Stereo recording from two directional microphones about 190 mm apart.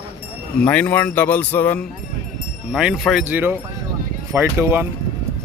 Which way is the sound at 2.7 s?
Centre (ahead or behind).